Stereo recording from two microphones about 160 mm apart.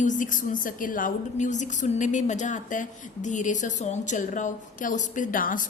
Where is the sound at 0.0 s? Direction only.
55° left (ahead or behind).